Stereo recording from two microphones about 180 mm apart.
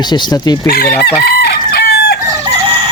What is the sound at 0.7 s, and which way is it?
Chicken, 60° left (ahead or behind).